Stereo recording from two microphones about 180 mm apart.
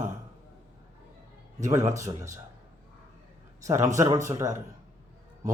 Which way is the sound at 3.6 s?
15° right (ahead or behind).